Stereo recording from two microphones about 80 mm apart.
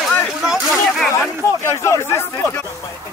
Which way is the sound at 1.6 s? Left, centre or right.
Left.